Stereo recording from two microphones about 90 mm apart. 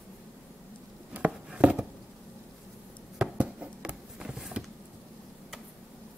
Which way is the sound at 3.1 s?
15° right (ahead or behind).